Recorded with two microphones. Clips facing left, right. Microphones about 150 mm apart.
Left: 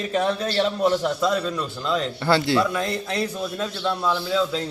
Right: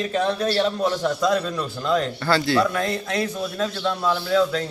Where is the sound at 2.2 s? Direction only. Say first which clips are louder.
Left 3 dB; 25° left (ahead or behind).